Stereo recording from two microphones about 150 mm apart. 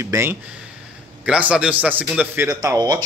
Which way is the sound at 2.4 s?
20° right (ahead or behind).